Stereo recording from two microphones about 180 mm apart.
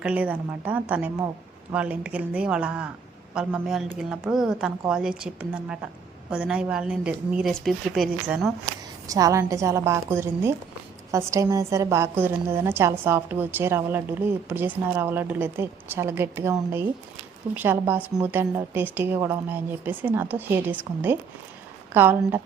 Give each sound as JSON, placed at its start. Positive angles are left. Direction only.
{"t": 0.0, "sound": "a woman's voice", "side_deg": -5}
{"t": 9.0, "sound": "a woman's voice", "side_deg": -20}